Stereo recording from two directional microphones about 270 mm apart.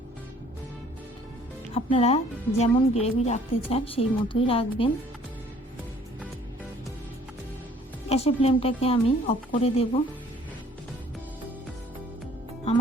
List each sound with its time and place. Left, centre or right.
1.7 s a woman's voice: left
8.1 s a woman's voice: left
12.7 s music: left